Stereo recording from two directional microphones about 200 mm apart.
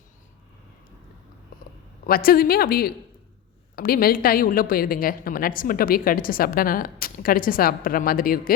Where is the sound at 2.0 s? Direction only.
45° left (ahead or behind).